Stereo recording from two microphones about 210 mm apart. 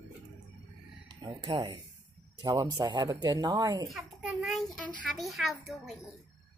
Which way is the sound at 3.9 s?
Centre (ahead or behind).